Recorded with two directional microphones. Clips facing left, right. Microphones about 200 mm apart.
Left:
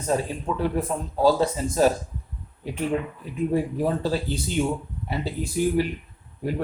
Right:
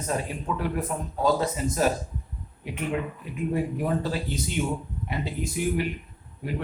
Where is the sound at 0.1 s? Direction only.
30° left (ahead or behind).